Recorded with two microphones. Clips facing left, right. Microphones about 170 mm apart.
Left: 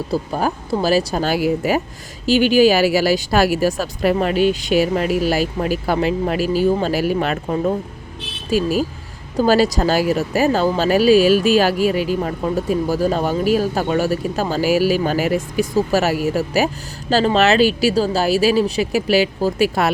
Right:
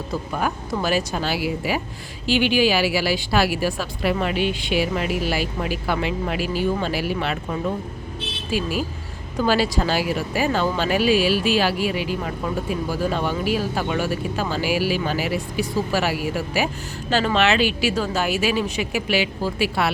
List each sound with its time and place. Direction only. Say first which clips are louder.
0.1 s speech: left 4 dB; 35° left (ahead or behind)